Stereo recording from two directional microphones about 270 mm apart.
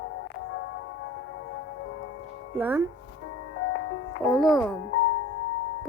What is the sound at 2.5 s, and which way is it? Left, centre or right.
Speech, centre.